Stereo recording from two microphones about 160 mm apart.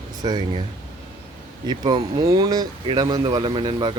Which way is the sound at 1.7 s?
25° right (ahead or behind).